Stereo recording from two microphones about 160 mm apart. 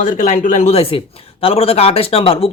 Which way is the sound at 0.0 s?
50° left (ahead or behind).